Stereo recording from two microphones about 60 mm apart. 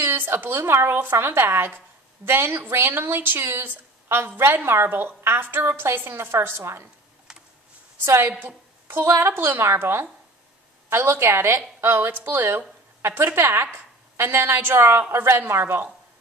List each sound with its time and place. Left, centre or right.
0.0 s a woman's voice: right
8.0 s a woman's voice: right
8.3 s speech: right
8.8 s a woman's voice: right